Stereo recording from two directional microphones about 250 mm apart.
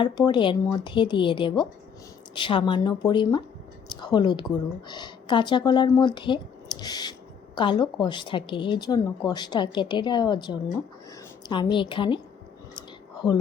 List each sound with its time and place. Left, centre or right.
0.0 s a woman's voice: centre
13.2 s speech: centre